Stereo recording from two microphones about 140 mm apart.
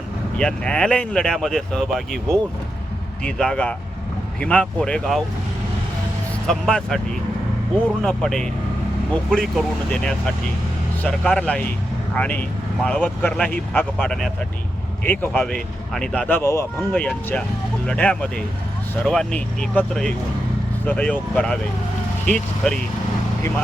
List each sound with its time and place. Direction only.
0.3 s speech: 5° left (ahead or behind)
6.5 s speech: 5° left (ahead or behind)
8.0 s speech: 5° left (ahead or behind)
16.4 s speech: 20° left (ahead or behind)
16.9 s speech: 10° left (ahead or behind)